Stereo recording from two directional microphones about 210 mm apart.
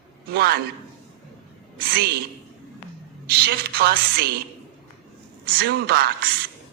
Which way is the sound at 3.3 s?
50° right (ahead or behind).